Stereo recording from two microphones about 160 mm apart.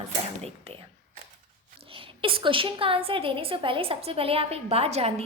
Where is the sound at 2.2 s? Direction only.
35° right (ahead or behind).